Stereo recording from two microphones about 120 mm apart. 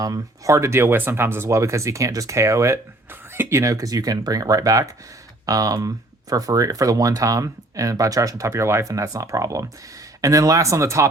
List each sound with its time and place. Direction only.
0.0 s speech: 30° right (ahead or behind)